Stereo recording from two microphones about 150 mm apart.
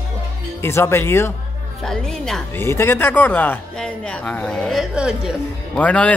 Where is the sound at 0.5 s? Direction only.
15° left (ahead or behind).